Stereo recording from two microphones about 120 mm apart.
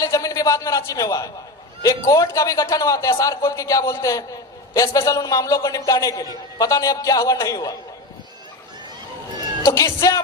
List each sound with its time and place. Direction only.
0.0 s a man's voice: 30° left (ahead or behind)
9.6 s a man's voice: 25° left (ahead or behind)